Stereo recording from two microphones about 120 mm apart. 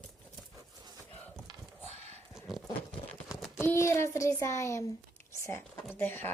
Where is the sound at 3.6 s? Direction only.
20° left (ahead or behind).